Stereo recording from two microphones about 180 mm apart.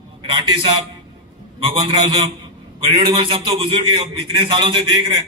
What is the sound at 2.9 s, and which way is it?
A man's voice, 25° right (ahead or behind).